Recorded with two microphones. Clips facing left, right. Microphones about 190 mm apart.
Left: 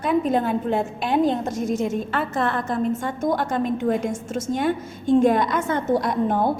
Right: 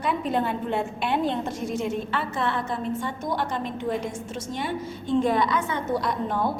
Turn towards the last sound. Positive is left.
turn(degrees=50)  # may be behind; listen again after turning